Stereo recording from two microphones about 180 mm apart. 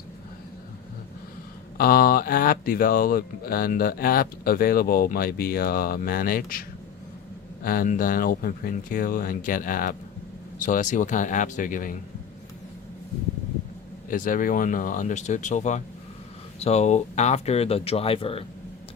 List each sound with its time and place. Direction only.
1.8 s speech: 55° left (ahead or behind)
14.1 s speech: 50° left (ahead or behind); by 18.4 s 30° left (ahead or behind)